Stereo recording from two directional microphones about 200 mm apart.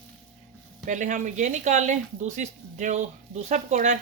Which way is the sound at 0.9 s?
40° right (ahead or behind).